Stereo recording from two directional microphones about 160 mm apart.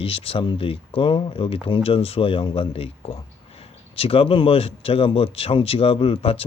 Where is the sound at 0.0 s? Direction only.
35° left (ahead or behind).